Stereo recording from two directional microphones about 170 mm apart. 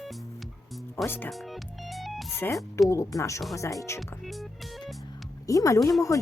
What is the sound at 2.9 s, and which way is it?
Speech, 20° left (ahead or behind).